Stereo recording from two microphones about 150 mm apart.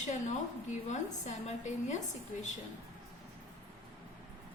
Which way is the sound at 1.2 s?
50° left (ahead or behind).